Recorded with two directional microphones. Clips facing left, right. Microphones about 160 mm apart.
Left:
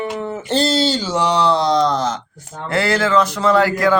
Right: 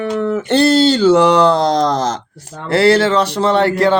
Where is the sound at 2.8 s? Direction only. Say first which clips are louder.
Right 4 dB; 30° right (ahead or behind).